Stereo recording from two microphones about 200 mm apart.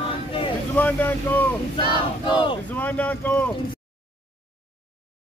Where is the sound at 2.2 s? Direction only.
25° left (ahead or behind).